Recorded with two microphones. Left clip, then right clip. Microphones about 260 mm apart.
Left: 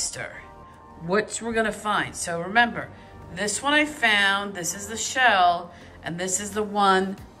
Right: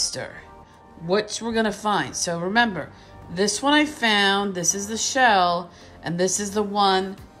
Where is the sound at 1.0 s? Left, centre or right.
Centre.